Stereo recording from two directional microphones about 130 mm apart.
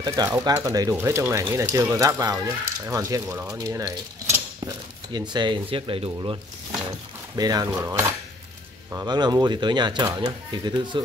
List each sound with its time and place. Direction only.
0.0 s speech: 25° right (ahead or behind); by 6.3 s 45° right (ahead or behind)
6.9 s speech: 30° right (ahead or behind)
7.7 s cutlery: 20° right (ahead or behind)
9.0 s speech: 35° right (ahead or behind)